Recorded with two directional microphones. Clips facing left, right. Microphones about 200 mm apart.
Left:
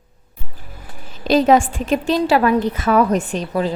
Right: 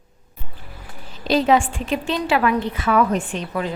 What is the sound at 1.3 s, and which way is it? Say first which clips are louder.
A woman's voice: left 4 dB; 45° left (ahead or behind).